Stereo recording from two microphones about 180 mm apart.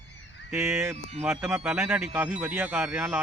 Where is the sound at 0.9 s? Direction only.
40° right (ahead or behind).